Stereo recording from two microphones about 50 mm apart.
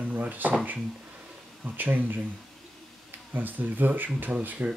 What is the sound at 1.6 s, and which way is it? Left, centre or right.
Speech, right.